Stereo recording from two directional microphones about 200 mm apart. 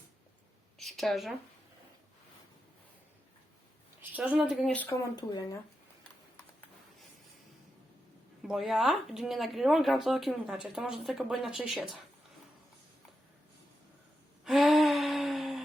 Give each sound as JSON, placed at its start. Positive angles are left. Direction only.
{"t": 0.8, "sound": "a sound", "side_deg": 0}
{"t": 4.1, "sound": "speech", "side_deg": -10}
{"t": 5.1, "sound": "speech", "side_deg": 20}
{"t": 6.0, "sound": "horse", "side_deg": 5}
{"t": 8.4, "sound": "speech", "side_deg": 0}
{"t": 14.4, "sound": "a sound", "side_deg": 0}